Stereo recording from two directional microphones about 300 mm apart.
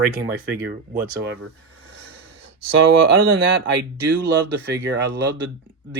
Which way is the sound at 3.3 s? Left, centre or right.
Right.